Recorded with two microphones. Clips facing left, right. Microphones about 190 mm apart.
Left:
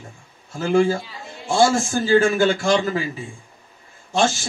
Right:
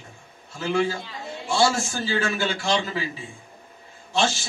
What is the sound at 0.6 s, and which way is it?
Speech, 50° left (ahead or behind).